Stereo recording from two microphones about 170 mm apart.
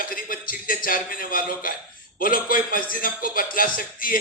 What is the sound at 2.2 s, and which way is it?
A man's voice, 55° left (ahead or behind).